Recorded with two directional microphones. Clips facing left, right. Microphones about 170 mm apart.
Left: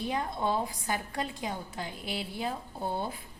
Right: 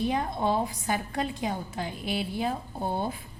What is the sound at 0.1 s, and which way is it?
A woman's voice, 20° right (ahead or behind).